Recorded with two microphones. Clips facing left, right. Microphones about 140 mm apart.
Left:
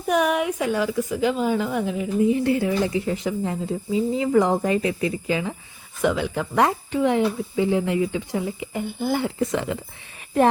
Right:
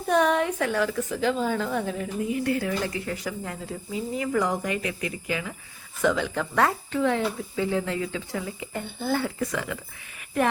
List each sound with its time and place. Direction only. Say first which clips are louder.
0.1 s speech: left 1 dB; 10° left (ahead or behind)
2.2 s speech: left 6 dB; 25° left (ahead or behind)
6.0 s speech: left 2 dB; 10° left (ahead or behind)